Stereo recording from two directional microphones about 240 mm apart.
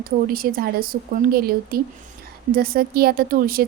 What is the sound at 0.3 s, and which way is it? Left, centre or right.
Speech, right.